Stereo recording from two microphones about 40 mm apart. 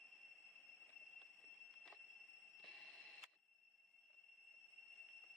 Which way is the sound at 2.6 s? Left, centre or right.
Centre.